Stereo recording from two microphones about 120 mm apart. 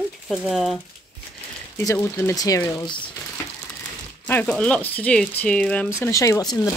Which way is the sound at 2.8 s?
40° left (ahead or behind).